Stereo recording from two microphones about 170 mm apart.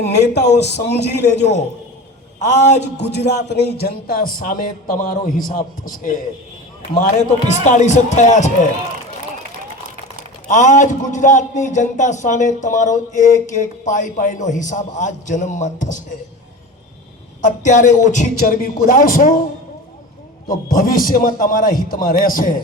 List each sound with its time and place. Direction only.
0.0 s a man's voice: 75° left (ahead or behind)
1.4 s speech: 40° left (ahead or behind)
3.0 s a man's voice: 75° left (ahead or behind); by 6.1 s 55° left (ahead or behind)
7.2 s a man's voice: 45° left (ahead or behind)
10.5 s a man's voice: 50° left (ahead or behind)
17.4 s a man's voice: 50° left (ahead or behind)
20.5 s a man's voice: 55° left (ahead or behind)